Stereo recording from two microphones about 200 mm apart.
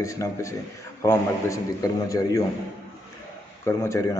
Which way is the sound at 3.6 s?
15° left (ahead or behind).